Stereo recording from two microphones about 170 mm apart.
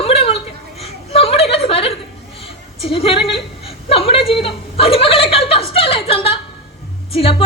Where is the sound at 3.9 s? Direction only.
35° left (ahead or behind).